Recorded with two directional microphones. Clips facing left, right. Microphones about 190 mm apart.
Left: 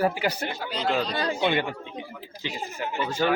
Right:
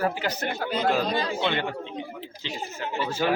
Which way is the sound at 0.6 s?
50° right (ahead or behind).